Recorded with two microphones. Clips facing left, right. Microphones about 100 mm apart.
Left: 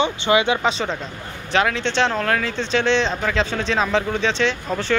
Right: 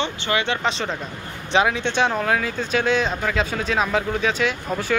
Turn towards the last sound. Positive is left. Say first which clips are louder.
# left 2 dB
turn(degrees=-5)  # may be behind; listen again after turning